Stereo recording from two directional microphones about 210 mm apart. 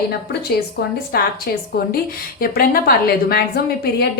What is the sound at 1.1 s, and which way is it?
Speech, 45° left (ahead or behind).